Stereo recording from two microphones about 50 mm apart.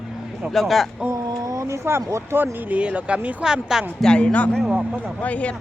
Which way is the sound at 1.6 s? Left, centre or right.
Right.